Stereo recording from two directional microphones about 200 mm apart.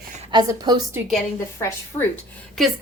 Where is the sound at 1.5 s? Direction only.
15° left (ahead or behind).